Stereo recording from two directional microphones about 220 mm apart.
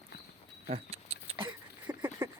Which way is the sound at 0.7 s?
25° right (ahead or behind).